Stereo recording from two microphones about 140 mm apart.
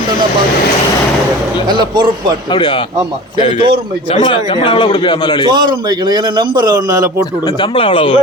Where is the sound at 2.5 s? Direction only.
35° left (ahead or behind).